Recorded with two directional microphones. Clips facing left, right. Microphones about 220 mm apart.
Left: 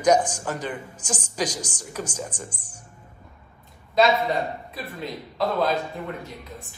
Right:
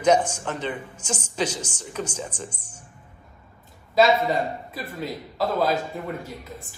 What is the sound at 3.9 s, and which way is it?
Speech, centre (ahead or behind).